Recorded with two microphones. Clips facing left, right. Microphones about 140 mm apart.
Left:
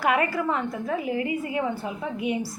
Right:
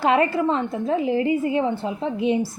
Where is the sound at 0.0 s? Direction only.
25° right (ahead or behind).